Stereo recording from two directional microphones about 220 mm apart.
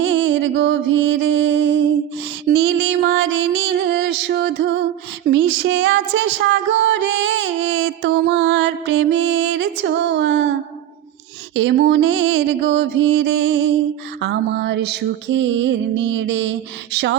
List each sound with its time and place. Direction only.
0.0 s music: 55° right (ahead or behind)
11.5 s music: 55° right (ahead or behind)